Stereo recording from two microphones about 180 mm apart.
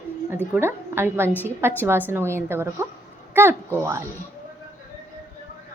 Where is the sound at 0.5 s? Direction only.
10° right (ahead or behind).